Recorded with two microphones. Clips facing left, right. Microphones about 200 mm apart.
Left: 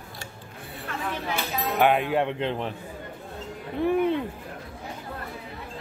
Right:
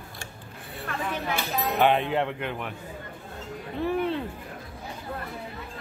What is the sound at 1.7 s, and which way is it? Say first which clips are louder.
Speech: left 1 dB; 10° left (ahead or behind).